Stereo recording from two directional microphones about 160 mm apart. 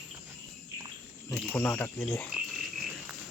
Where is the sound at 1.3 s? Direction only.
15° left (ahead or behind).